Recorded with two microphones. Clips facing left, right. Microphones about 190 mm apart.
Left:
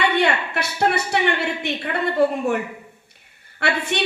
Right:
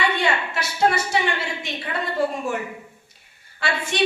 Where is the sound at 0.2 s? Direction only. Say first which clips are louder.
Left 3 dB; 60° left (ahead or behind).